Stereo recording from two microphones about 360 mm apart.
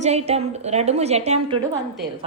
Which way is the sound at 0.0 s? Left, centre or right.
Centre.